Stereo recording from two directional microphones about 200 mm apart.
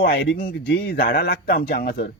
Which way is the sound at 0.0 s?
45° left (ahead or behind).